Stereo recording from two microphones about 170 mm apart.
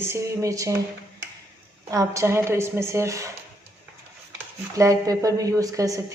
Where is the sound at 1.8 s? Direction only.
20° right (ahead or behind).